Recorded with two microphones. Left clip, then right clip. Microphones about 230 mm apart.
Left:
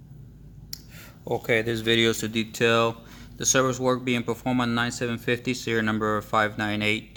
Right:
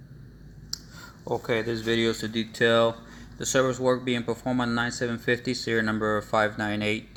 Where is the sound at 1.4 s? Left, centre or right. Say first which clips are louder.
Left 5 dB; left.